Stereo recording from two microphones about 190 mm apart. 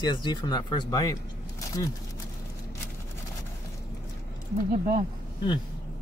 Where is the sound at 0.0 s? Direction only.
25° left (ahead or behind).